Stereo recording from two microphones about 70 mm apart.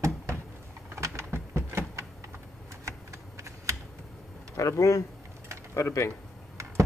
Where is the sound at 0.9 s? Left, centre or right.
Right.